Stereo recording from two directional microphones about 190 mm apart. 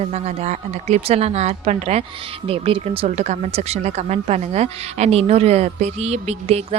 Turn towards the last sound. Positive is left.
turn(degrees=-35)  # may be behind; listen again after turning